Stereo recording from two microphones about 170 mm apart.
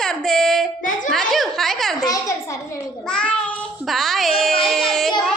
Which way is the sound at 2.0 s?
20° left (ahead or behind).